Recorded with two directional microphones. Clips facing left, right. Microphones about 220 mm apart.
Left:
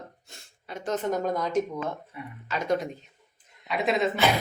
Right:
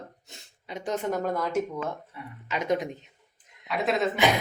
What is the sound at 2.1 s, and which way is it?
Speech, 15° left (ahead or behind).